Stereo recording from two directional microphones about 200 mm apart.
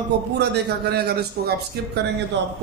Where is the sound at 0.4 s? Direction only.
55° right (ahead or behind).